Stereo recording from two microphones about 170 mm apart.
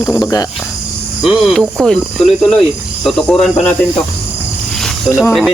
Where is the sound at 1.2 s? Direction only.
Centre (ahead or behind).